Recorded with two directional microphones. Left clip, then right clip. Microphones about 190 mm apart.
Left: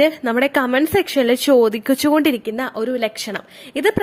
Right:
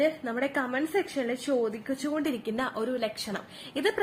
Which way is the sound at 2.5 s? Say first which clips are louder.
Left 8 dB; 35° left (ahead or behind).